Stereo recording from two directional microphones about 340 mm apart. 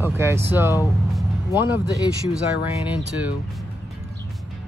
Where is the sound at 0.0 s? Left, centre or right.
Centre.